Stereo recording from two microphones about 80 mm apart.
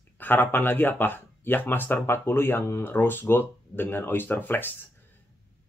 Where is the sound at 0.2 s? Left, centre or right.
Left.